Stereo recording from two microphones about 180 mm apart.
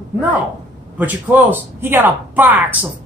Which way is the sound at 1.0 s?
10° right (ahead or behind).